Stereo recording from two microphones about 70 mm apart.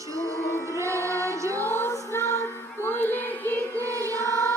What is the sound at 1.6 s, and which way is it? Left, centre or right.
Music, left.